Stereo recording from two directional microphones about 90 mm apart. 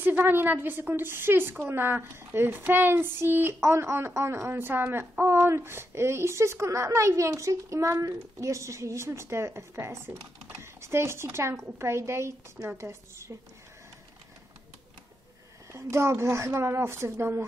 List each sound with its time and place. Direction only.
0.0 s a woman's voice: 20° right (ahead or behind)
15.7 s speech: 30° right (ahead or behind)